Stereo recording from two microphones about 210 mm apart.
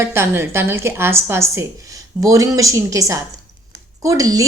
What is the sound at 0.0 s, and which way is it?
A woman's voice, 10° right (ahead or behind).